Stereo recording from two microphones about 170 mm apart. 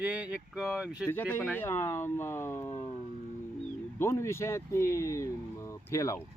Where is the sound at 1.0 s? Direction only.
15° left (ahead or behind).